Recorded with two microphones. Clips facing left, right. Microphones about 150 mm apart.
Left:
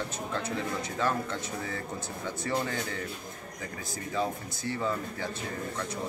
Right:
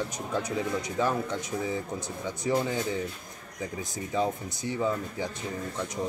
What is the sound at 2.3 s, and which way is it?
Speech, 15° right (ahead or behind).